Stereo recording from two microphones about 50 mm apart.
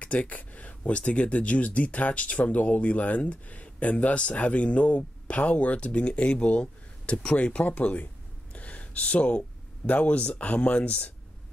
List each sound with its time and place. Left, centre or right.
0.0 s speech: left
8.5 s a sound: left
9.8 s speech: left